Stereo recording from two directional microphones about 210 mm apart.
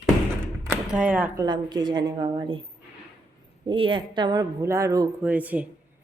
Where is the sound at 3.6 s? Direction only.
25° right (ahead or behind).